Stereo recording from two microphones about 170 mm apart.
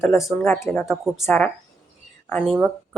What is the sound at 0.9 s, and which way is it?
Speech, centre (ahead or behind).